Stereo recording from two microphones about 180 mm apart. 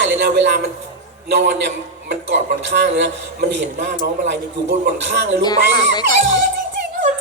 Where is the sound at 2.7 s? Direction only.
75° right (ahead or behind).